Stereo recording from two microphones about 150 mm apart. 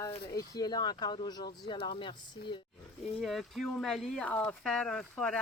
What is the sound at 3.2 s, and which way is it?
Speech, centre (ahead or behind).